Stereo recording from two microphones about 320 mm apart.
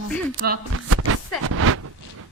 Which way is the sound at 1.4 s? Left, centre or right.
Right.